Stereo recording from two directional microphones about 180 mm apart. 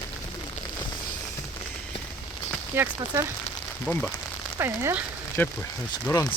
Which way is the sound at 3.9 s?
5° left (ahead or behind).